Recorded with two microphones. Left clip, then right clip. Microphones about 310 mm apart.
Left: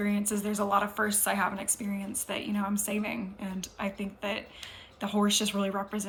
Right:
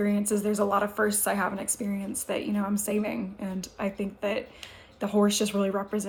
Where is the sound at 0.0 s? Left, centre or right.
Centre.